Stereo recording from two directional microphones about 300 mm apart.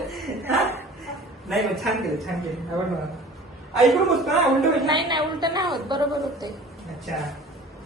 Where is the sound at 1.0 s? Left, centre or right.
Centre.